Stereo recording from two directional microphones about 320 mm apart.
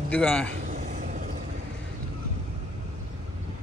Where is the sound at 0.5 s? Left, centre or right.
Right.